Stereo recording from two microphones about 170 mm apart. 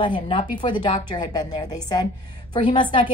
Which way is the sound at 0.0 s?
30° left (ahead or behind).